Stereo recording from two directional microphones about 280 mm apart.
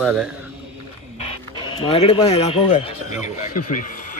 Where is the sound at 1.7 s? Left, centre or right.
Centre.